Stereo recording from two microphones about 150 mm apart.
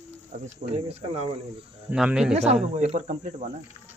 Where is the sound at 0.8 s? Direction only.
45° right (ahead or behind).